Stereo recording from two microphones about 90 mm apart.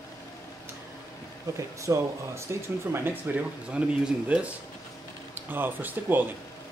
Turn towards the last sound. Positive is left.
turn(degrees=-20)  # may be behind; listen again after turning